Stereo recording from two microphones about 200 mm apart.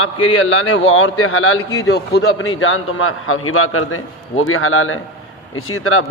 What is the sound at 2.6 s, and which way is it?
A man's voice, 90° left.